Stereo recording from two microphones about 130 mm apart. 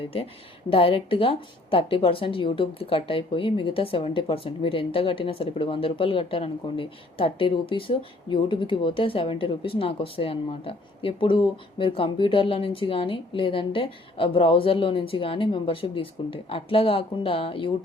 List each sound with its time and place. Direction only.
0.0 s speech: 45° left (ahead or behind)